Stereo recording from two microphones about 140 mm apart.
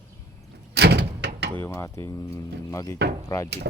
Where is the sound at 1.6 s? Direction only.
20° left (ahead or behind).